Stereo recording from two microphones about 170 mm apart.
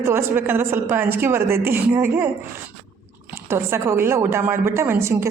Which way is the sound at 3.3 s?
15° right (ahead or behind).